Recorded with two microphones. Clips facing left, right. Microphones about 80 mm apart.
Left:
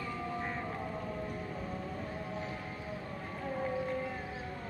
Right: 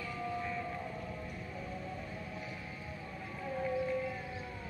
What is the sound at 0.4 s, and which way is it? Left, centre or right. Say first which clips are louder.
Whale vocalization: left 1 dB; left.